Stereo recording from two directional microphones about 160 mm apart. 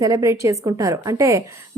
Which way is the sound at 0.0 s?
20° right (ahead or behind).